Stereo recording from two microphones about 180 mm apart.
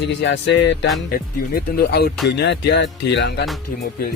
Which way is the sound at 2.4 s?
75° left (ahead or behind).